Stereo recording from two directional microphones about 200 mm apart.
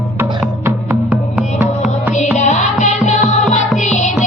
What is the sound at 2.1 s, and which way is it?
Music, 35° left (ahead or behind).